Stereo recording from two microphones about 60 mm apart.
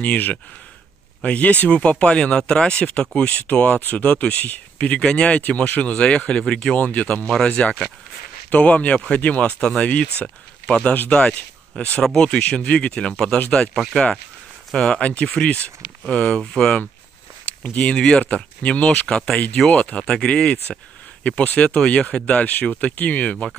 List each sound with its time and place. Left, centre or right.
0.0 s speech: left
9.6 s speech: centre
14.7 s speech: centre
19.7 s speech: left